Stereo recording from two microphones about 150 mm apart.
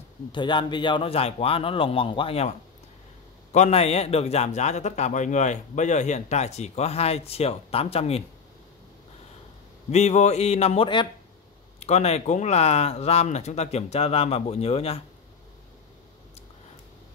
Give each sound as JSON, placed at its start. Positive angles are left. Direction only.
{"t": 0.3, "sound": "a man's voice", "side_deg": 30}
{"t": 3.5, "sound": "a man's voice", "side_deg": 45}
{"t": 9.8, "sound": "a man's voice", "side_deg": 50}
{"t": 11.8, "sound": "a man's voice", "side_deg": 45}